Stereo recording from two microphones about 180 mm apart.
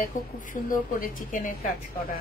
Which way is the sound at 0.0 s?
50° left (ahead or behind).